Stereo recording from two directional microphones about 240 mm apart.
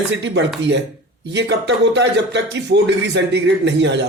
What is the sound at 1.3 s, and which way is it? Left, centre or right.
Speech, right.